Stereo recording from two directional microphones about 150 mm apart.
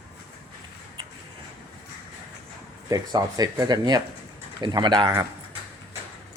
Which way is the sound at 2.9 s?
25° right (ahead or behind).